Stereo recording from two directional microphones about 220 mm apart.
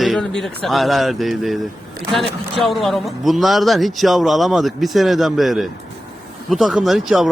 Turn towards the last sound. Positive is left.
turn(degrees=0)  # may be behind; listen again after turning